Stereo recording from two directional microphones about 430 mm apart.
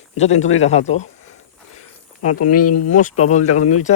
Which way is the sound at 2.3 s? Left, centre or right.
Left.